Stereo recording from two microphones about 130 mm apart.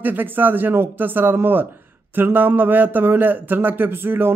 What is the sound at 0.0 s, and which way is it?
A man's voice, 15° right (ahead or behind).